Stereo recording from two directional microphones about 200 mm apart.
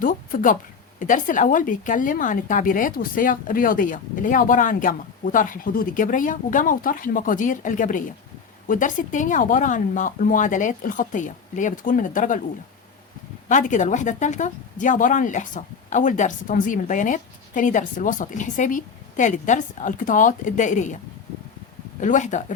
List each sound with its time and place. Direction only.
0.0 s speech: 45° left (ahead or behind)
13.5 s speech: 40° left (ahead or behind)
22.0 s speech: 40° left (ahead or behind)